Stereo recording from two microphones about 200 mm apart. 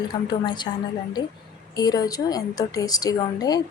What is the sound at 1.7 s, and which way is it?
A woman's voice, 20° left (ahead or behind).